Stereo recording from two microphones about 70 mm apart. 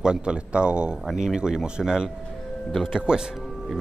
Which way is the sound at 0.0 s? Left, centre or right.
Centre.